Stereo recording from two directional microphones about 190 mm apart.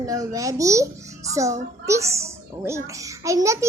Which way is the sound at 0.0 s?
15° right (ahead or behind).